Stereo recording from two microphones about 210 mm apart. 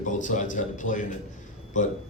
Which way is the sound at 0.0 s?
35° left (ahead or behind).